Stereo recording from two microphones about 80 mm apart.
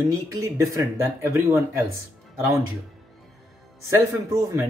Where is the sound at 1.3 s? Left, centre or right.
Right.